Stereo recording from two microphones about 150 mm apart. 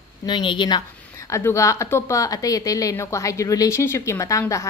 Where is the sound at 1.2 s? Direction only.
20° left (ahead or behind).